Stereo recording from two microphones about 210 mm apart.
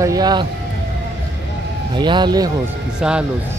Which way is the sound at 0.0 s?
20° right (ahead or behind).